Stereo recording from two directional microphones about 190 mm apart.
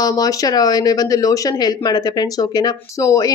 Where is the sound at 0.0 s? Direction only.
20° left (ahead or behind).